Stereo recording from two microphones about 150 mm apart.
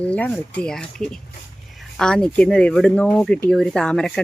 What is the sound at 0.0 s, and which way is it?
Speech, 10° left (ahead or behind).